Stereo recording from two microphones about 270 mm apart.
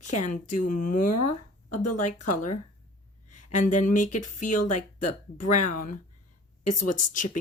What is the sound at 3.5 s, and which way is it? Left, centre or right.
Speech, left.